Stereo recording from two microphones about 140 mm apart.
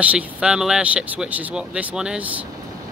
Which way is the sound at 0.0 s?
10° right (ahead or behind).